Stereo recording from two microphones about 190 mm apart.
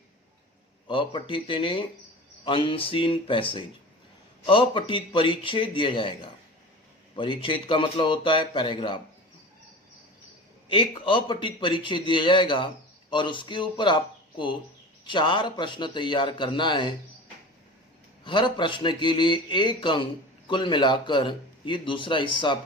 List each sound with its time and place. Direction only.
0.9 s a man's voice: 25° left (ahead or behind)
4.4 s a man's voice: 30° left (ahead or behind)
10.7 s a man's voice: 25° left (ahead or behind)
18.2 s a man's voice: 25° left (ahead or behind)